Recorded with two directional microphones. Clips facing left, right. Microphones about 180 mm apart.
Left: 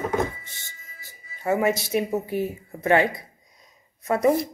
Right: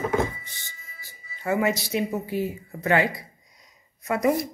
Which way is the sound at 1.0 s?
20° left (ahead or behind).